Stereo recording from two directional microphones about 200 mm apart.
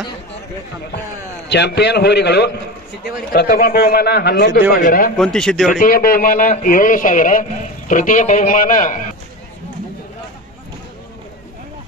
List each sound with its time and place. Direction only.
1.5 s a man's voice: 60° left (ahead or behind)
5.1 s a man's voice: 5° left (ahead or behind)
5.7 s a man's voice: 45° left (ahead or behind)